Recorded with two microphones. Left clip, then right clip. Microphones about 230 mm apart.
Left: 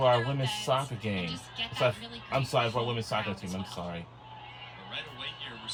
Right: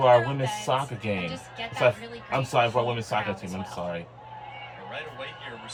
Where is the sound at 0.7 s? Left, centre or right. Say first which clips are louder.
Right 3 dB; left.